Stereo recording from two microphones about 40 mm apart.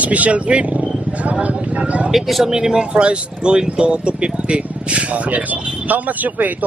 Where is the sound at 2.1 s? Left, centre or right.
Centre.